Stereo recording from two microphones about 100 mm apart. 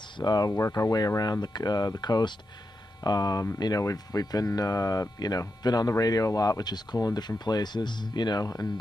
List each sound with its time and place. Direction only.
0.2 s speech: 40° left (ahead or behind)